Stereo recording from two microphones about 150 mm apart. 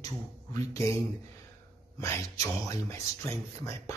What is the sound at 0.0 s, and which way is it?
Speech, 20° left (ahead or behind).